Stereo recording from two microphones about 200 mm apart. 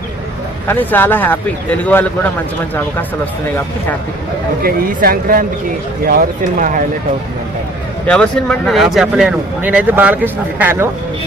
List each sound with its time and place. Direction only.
0.7 s speech: 10° left (ahead or behind)
4.6 s speech: 45° right (ahead or behind)
8.0 s speech: 5° left (ahead or behind)